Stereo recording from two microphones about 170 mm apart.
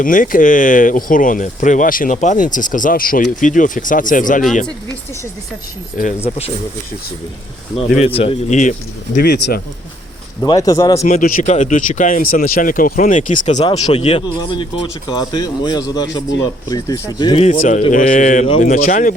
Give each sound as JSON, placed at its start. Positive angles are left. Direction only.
{"t": 0.0, "sound": "speech", "side_deg": 55}
{"t": 6.2, "sound": "speech", "side_deg": 35}
{"t": 7.9, "sound": "speech", "side_deg": 35}
{"t": 9.1, "sound": "speech", "side_deg": 70}
{"t": 10.4, "sound": "a man's voice", "side_deg": 20}
{"t": 11.0, "sound": "speech", "side_deg": 45}
{"t": 13.9, "sound": "a man's voice", "side_deg": 35}
{"t": 17.4, "sound": "speech", "side_deg": 50}